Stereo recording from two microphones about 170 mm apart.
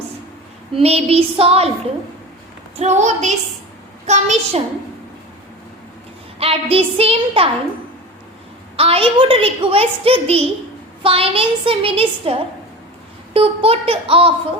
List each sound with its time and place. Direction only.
0.8 s a woman's voice: 35° right (ahead or behind)
2.7 s a woman's voice: 40° right (ahead or behind)
6.4 s a woman's voice: 35° right (ahead or behind)
8.7 s a woman's voice: 35° right (ahead or behind)